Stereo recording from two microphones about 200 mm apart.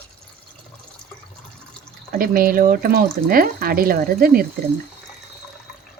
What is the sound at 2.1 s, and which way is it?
Speech, 45° right (ahead or behind).